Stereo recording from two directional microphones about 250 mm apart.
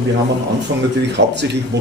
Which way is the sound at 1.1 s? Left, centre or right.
Right.